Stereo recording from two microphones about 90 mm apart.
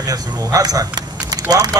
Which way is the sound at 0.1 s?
45° right (ahead or behind).